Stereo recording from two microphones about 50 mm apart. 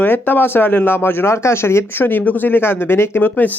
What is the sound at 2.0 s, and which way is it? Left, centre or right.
Speech, left.